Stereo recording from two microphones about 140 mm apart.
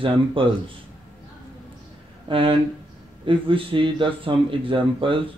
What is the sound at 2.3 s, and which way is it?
Speech, 40° right (ahead or behind).